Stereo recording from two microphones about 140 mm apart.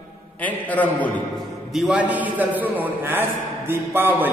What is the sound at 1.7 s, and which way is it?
A man's voice, 5° right (ahead or behind).